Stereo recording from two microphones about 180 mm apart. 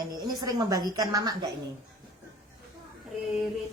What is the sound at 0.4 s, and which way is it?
A woman's voice, 20° right (ahead or behind).